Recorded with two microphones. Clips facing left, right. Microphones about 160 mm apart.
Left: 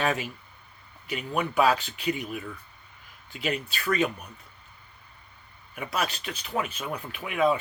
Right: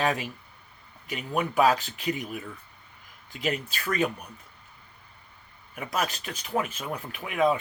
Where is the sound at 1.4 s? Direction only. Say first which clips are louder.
Right 1 dB; 40° right (ahead or behind).